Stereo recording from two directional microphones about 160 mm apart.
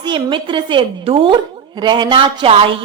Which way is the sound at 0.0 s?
30° right (ahead or behind).